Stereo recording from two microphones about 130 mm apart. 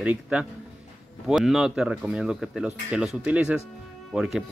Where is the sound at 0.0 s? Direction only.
10° right (ahead or behind).